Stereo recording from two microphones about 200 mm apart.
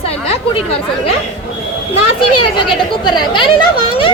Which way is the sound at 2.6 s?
25° left (ahead or behind).